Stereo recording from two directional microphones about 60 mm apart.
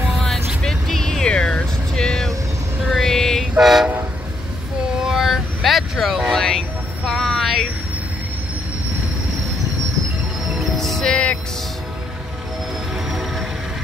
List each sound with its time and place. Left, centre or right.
0.1 s music: centre
0.6 s vehicle: centre
3.5 s train: centre
5.0 s vehicle: centre
7.1 s a sound: centre
10.5 s music: centre
11.1 s music: centre